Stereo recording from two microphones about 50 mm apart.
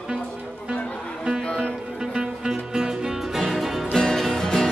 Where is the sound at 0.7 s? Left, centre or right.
Left.